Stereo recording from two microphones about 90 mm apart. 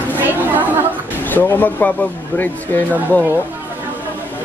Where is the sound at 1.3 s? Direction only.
20° left (ahead or behind).